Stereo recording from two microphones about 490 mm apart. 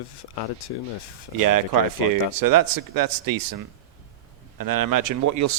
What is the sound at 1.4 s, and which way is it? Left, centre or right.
Speech, right.